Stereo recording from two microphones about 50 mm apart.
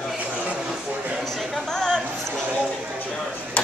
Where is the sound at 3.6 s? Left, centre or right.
Left.